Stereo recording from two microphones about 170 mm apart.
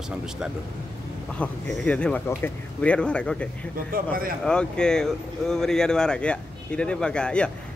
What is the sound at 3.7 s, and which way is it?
Speech, 55° right (ahead or behind).